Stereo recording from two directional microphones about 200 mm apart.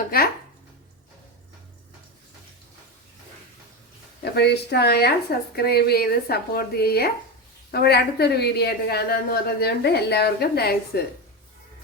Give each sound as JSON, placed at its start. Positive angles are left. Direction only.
{"t": 4.2, "sound": "a woman's voice", "side_deg": 55}